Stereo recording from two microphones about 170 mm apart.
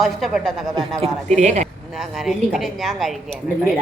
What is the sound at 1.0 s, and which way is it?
Speech, 40° right (ahead or behind).